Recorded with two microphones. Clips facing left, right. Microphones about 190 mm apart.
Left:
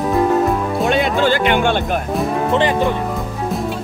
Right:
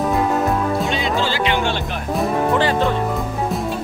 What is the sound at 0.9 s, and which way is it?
Music, 55° left (ahead or behind).